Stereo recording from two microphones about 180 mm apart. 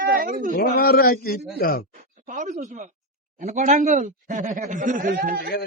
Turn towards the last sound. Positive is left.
turn(degrees=-55)  # may be behind; listen again after turning